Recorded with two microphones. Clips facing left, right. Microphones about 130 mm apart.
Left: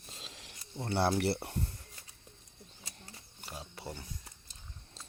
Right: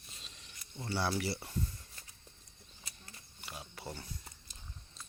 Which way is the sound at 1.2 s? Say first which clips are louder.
Left 4 dB; 60° left (ahead or behind).